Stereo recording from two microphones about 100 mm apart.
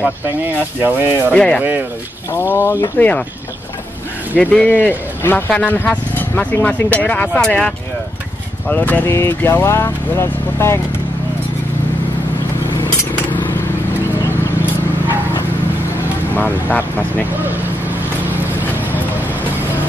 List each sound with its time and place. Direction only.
0.8 s speech: 20° right (ahead or behind)
1.3 s speech: 10° left (ahead or behind)
1.6 s speech: 20° right (ahead or behind)
2.3 s speech: 25° left (ahead or behind)
3.0 s speech: 15° left (ahead or behind)
4.3 s a man's voice: 10° left (ahead or behind); by 10.8 s 25° left (ahead or behind)
12.8 s a sound: 20° left (ahead or behind)
16.3 s speech: 15° left (ahead or behind)